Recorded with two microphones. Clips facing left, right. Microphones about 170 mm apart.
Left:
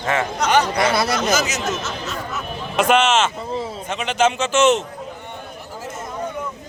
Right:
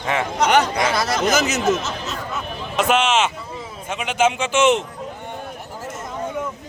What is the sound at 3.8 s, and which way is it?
A man's voice, 10° right (ahead or behind).